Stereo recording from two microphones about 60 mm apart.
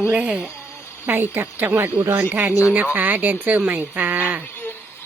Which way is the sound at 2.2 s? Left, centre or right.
Right.